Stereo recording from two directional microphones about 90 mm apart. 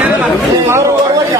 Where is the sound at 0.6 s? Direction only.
30° right (ahead or behind).